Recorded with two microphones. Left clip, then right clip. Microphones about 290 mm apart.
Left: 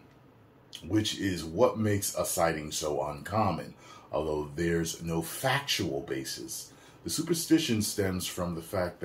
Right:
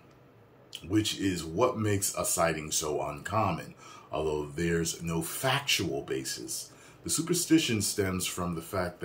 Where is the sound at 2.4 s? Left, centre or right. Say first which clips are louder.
Even; centre.